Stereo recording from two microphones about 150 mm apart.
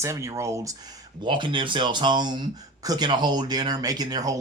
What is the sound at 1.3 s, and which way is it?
Speech, 35° right (ahead or behind).